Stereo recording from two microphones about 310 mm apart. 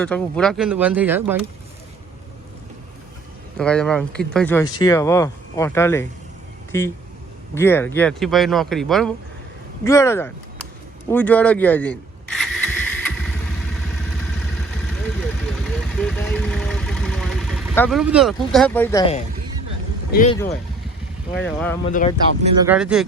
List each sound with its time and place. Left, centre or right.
0.0 s speech: centre
3.6 s speech: centre
11.1 s a sound: centre
16.0 s vehicle: centre
20.1 s speech: left
20.3 s speech: centre
21.8 s speech: left
22.6 s speech: centre